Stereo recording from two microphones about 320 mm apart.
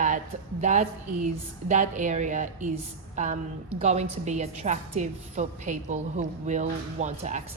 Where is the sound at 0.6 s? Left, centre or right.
Right.